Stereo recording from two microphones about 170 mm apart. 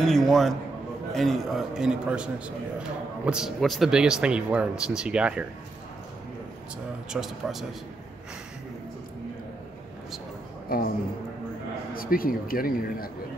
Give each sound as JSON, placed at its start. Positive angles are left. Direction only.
{"t": 0.0, "sound": "speech", "side_deg": 0}
{"t": 7.1, "sound": "speech", "side_deg": 0}
{"t": 10.7, "sound": "speech", "side_deg": 60}
{"t": 11.9, "sound": "speech", "side_deg": 60}